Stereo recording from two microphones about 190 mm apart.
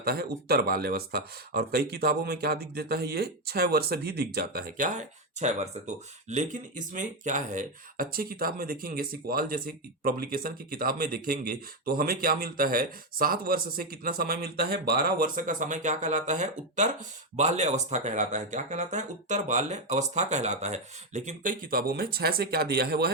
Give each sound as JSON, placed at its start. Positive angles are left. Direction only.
{"t": 0.0, "sound": "speech", "side_deg": -55}